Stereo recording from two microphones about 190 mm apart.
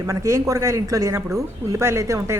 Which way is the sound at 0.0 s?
15° right (ahead or behind).